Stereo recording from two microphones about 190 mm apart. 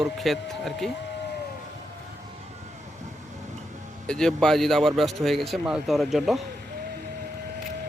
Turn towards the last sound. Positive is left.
turn(degrees=0)  # may be behind; listen again after turning